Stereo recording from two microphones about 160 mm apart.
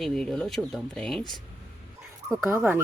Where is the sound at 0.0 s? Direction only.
5° left (ahead or behind).